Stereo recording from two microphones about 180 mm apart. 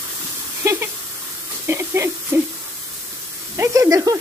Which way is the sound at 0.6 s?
15° right (ahead or behind).